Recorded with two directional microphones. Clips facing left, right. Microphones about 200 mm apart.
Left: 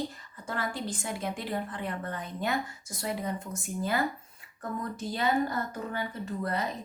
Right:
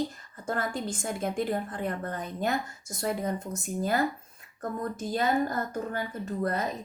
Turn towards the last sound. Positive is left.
turn(degrees=-45)  # may be behind; listen again after turning